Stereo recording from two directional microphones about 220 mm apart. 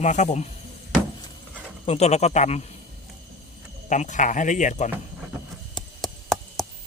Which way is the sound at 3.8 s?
35° left (ahead or behind).